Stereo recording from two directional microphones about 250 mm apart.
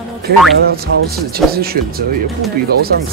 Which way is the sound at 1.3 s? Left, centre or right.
Right.